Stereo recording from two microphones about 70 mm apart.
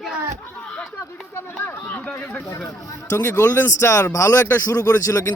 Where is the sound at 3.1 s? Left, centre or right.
Left.